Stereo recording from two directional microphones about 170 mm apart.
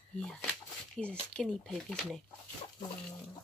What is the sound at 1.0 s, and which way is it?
Speech, 5° left (ahead or behind).